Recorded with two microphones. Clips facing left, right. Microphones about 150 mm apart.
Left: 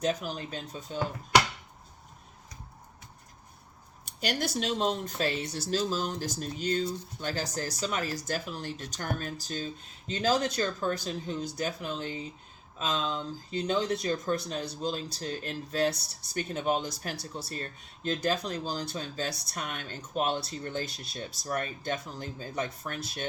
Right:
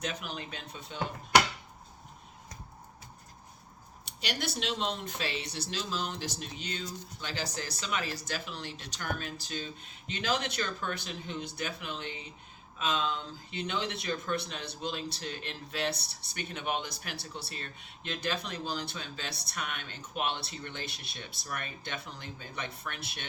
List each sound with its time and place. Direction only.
0.0 s speech: 35° left (ahead or behind)
4.0 s speech: 45° left (ahead or behind)